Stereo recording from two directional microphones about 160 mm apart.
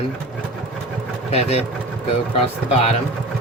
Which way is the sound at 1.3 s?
40° left (ahead or behind).